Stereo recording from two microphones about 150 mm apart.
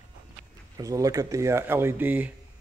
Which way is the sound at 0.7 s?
20° right (ahead or behind).